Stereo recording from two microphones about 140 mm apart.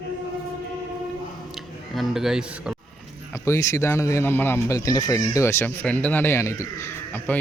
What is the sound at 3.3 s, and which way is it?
Speech, 20° left (ahead or behind).